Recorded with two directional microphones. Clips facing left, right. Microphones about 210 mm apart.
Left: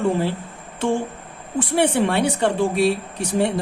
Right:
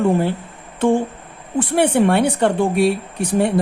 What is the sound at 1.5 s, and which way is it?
Speech, 55° right (ahead or behind).